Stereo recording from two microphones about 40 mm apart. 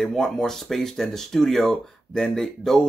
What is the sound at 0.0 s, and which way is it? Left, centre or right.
Speech, centre.